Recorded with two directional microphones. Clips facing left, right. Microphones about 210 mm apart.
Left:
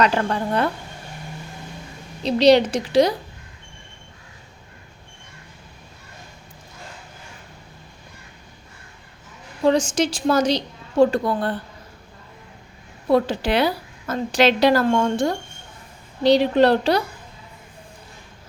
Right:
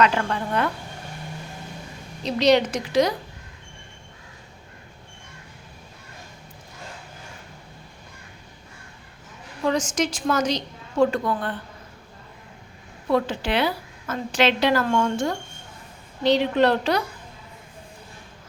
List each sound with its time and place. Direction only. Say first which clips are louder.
0.0 s a woman's voice: left 2 dB; 35° left (ahead or behind)
2.2 s a woman's voice: left 4 dB; 30° left (ahead or behind)
9.6 s a woman's voice: left 5 dB; 30° left (ahead or behind)
13.1 s a woman's voice: left 4 dB; 35° left (ahead or behind)